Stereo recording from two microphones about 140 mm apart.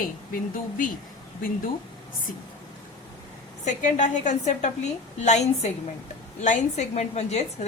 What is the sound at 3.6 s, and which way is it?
A woman's voice, 60° left (ahead or behind).